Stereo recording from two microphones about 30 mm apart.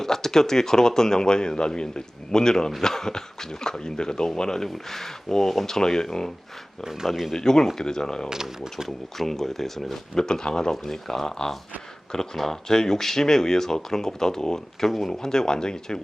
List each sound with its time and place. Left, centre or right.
0.0 s a man's voice: centre
7.3 s a man's voice: centre
8.3 s speech: centre
9.1 s speech: centre
10.2 s a man's voice: left
12.4 s speech: centre
14.8 s speech: centre
15.1 s a man's voice: centre